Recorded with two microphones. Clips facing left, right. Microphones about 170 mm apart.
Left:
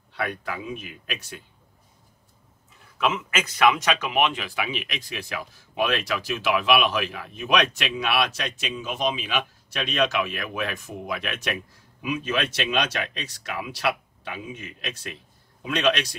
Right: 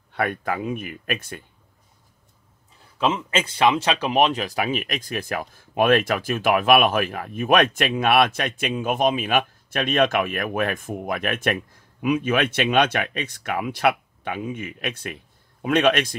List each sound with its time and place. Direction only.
0.1 s speech: 50° right (ahead or behind)
3.0 s speech: 30° right (ahead or behind); by 16.2 s 50° right (ahead or behind)